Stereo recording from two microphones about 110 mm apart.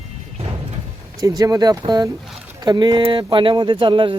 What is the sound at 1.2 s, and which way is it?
Speech, 35° right (ahead or behind).